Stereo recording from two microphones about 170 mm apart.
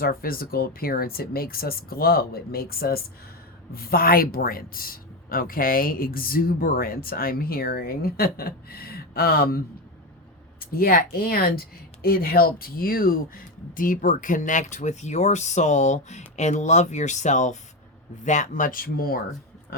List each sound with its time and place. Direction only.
0.0 s speech: 60° left (ahead or behind)
10.6 s speech: 60° left (ahead or behind)